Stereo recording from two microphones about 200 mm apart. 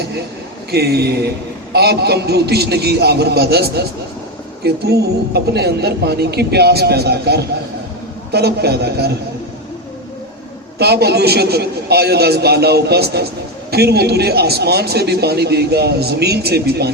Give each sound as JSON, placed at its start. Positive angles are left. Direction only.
{"t": 0.7, "sound": "a man's voice", "side_deg": -55}
{"t": 10.8, "sound": "a man's voice", "side_deg": -55}